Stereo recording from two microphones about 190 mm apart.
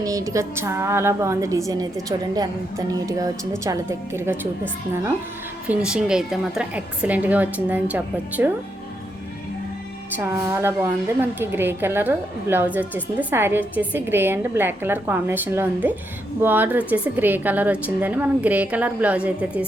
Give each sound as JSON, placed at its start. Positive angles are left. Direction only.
{"t": 0.0, "sound": "a woman's voice", "side_deg": -15}
{"t": 10.2, "sound": "a woman's voice", "side_deg": -15}